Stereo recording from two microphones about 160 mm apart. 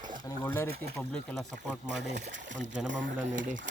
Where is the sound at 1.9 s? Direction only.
90° right.